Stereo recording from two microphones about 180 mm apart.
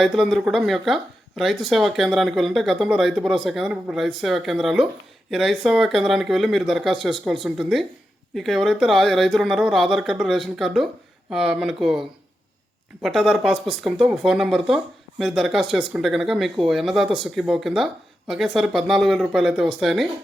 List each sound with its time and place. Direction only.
0.0 s speech: centre (ahead or behind)